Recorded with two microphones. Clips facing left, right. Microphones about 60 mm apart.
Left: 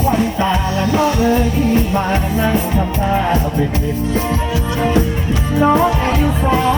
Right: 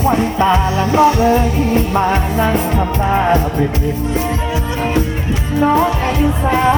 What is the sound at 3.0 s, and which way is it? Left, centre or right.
Music, right.